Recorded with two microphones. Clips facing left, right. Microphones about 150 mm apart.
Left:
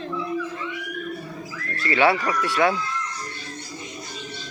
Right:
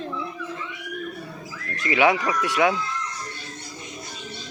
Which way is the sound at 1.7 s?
15° right (ahead or behind).